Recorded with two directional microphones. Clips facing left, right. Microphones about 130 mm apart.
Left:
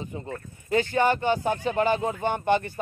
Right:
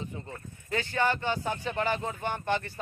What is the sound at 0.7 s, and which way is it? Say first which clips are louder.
Speech: left 6 dB; 15° left (ahead or behind).